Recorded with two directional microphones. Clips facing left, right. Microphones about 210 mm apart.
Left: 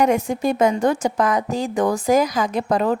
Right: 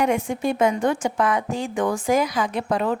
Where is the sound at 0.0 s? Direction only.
40° left (ahead or behind).